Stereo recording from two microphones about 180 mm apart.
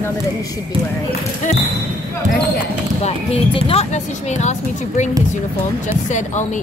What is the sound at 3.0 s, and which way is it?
Speech, 30° left (ahead or behind).